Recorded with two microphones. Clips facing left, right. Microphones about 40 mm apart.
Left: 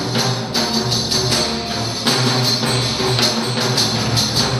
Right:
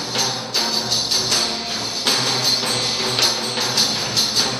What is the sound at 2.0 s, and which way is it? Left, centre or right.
Music, centre.